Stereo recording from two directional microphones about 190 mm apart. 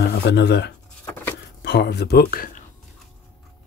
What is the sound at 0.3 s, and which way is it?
Speech, 60° left (ahead or behind).